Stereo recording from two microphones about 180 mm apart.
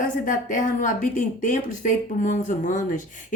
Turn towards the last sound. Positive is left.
turn(degrees=45)  # may be behind; listen again after turning